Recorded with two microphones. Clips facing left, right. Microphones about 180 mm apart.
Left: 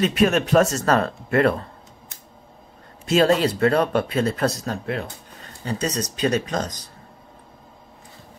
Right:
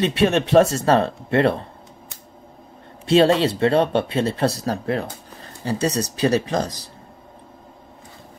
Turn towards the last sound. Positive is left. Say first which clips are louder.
# right 3 dB
turn(degrees=-30)  # may be behind; listen again after turning